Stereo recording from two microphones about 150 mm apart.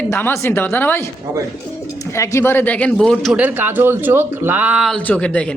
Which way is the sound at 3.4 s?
15° right (ahead or behind).